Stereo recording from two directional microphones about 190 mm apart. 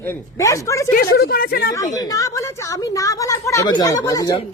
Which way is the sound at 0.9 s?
50° left (ahead or behind).